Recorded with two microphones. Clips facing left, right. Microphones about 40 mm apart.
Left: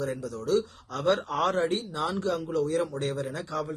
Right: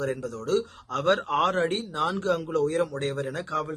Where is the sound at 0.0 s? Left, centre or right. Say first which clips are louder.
Right 2 dB; right.